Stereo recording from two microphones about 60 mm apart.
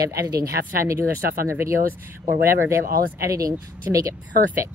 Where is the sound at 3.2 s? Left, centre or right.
Right.